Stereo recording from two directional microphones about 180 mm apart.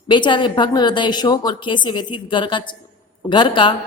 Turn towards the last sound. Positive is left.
turn(degrees=25)  # may be behind; listen again after turning